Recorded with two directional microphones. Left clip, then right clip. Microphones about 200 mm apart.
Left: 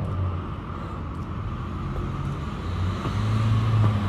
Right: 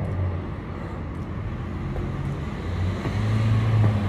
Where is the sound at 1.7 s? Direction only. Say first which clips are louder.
Right 1 dB; 15° left (ahead or behind).